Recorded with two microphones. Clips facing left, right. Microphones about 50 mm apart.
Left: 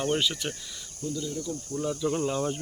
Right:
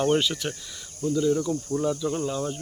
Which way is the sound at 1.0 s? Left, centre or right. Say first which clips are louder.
Right 9 dB; right.